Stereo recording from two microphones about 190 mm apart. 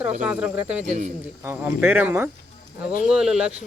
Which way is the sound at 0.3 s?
5° right (ahead or behind).